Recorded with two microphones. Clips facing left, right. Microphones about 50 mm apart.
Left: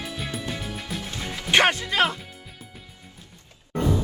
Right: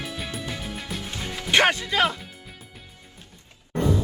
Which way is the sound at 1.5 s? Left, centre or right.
Left.